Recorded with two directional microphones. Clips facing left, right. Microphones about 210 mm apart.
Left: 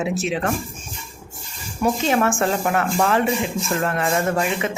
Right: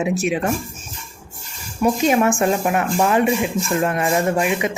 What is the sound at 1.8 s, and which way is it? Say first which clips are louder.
Speech: right 3 dB; 15° right (ahead or behind).